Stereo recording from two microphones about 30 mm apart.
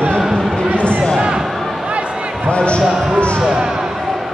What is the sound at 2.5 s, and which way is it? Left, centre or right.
Basketball bounce, left.